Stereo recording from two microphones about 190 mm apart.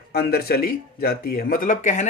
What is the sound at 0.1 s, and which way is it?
Speech, 55° left (ahead or behind).